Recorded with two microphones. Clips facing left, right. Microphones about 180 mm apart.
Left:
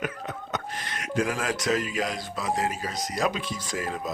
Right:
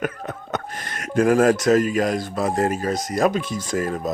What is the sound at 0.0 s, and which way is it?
Speech, 50° right (ahead or behind).